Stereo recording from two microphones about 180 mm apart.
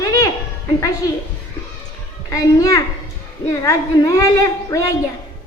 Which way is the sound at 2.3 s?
20° left (ahead or behind).